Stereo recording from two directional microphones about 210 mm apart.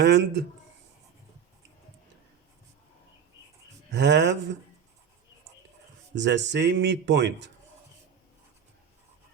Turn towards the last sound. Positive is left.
turn(degrees=-55)  # may be behind; listen again after turning